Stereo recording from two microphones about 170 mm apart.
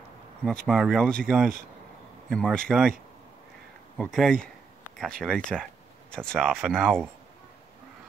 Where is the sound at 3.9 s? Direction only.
Centre (ahead or behind).